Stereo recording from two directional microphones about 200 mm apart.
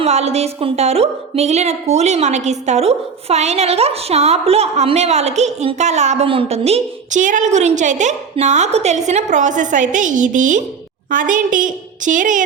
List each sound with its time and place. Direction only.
0.0 s speech: 30° right (ahead or behind)